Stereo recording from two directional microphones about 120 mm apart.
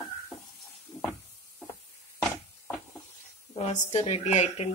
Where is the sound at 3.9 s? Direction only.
65° left (ahead or behind).